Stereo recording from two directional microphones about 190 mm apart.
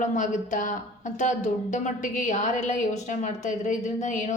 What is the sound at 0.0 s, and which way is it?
Speech, 40° left (ahead or behind).